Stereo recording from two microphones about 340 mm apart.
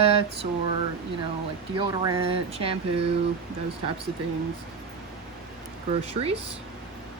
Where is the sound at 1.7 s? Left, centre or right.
Centre.